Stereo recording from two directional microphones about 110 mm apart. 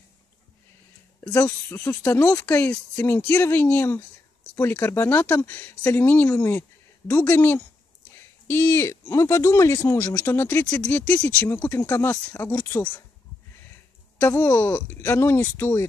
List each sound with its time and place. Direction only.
1.2 s speech: 15° left (ahead or behind)
14.1 s speech: 15° left (ahead or behind)